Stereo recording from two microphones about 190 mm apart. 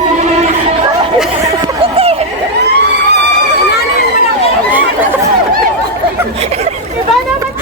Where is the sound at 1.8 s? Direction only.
30° right (ahead or behind).